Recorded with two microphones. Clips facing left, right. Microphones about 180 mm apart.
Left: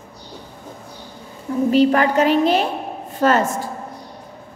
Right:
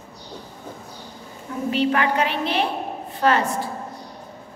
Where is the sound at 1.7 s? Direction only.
40° left (ahead or behind).